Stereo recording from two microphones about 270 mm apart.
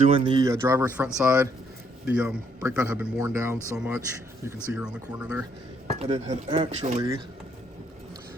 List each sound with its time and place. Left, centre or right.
0.0 s a man's voice: centre
6.0 s speech: right